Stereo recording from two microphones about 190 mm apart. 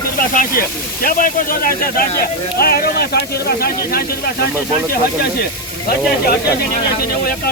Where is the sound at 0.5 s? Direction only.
50° left (ahead or behind).